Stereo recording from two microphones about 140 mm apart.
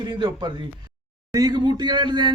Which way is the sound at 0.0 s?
35° right (ahead or behind).